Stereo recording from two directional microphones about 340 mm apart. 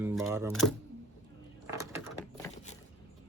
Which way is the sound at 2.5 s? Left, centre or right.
Centre.